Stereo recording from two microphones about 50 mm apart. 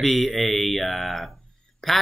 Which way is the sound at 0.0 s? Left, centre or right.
Centre.